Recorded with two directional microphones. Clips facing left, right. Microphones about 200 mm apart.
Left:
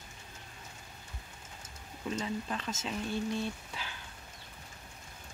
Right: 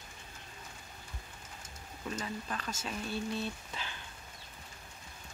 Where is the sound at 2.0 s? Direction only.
20° left (ahead or behind).